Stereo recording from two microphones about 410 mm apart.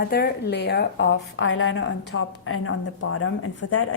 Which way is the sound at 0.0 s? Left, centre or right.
Left.